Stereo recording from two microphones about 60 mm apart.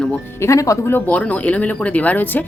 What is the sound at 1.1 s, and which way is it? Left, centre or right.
Speech, left.